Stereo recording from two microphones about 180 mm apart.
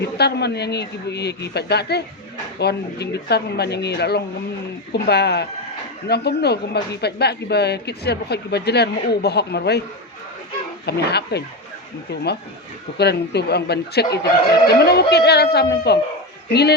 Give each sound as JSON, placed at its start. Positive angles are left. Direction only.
{"t": 0.0, "sound": "a man's voice", "side_deg": 65}
{"t": 10.8, "sound": "a man's voice", "side_deg": 65}
{"t": 13.0, "sound": "a woman's voice", "side_deg": 65}